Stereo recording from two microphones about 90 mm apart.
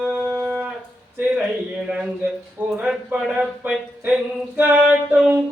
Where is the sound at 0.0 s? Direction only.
20° right (ahead or behind).